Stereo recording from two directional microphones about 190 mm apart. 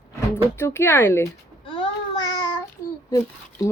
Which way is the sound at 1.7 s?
25° left (ahead or behind).